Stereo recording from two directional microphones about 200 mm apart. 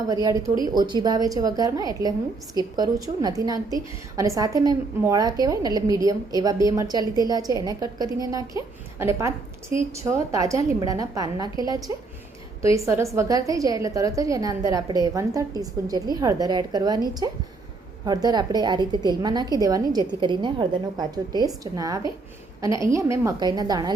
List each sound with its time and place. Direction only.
0.1 s a woman's voice: 15° right (ahead or behind)